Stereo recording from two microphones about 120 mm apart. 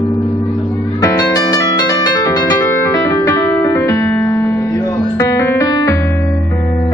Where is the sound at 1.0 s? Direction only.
30° left (ahead or behind).